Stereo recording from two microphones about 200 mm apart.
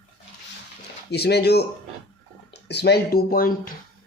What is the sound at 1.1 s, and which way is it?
Speech, 55° left (ahead or behind).